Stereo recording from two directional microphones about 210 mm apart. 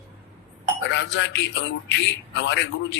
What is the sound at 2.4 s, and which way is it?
Speech, 60° left (ahead or behind).